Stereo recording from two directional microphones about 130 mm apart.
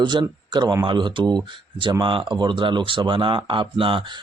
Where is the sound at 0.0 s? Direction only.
35° right (ahead or behind).